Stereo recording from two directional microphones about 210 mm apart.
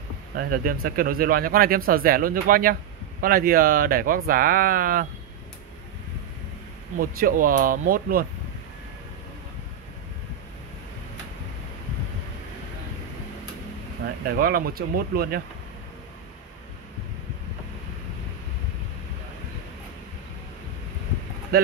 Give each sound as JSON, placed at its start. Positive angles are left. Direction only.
{"t": 0.4, "sound": "speech", "side_deg": -45}
{"t": 7.0, "sound": "speech", "side_deg": -45}
{"t": 14.0, "sound": "speech", "side_deg": -45}